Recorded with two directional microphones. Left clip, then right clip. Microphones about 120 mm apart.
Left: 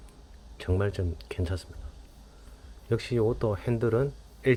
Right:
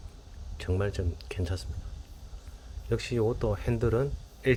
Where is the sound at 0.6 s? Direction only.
20° left (ahead or behind).